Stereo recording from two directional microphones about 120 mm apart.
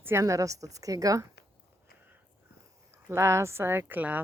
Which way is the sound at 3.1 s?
20° right (ahead or behind).